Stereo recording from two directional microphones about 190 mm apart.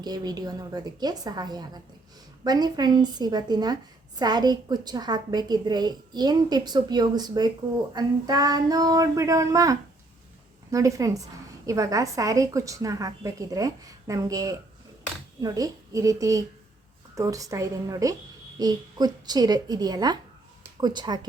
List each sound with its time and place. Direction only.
0.0 s a woman's voice: 20° right (ahead or behind)